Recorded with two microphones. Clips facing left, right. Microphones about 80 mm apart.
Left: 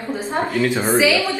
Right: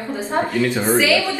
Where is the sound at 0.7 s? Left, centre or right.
Left.